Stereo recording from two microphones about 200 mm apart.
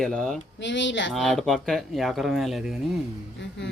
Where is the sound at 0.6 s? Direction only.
65° left (ahead or behind).